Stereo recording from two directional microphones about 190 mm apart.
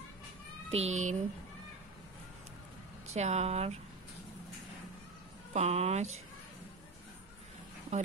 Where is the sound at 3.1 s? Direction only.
35° right (ahead or behind).